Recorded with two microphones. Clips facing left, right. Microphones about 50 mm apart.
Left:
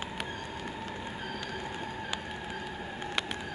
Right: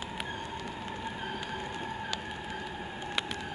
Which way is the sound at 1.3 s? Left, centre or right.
Centre.